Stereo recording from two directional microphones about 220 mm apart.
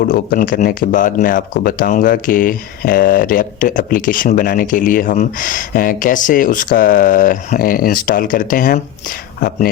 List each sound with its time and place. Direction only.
0.0 s speech: 40° left (ahead or behind)